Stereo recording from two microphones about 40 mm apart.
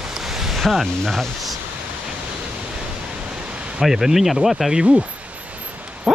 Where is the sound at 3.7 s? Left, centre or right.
Centre.